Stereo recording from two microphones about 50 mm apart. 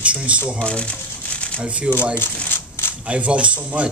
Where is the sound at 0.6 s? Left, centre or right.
Left.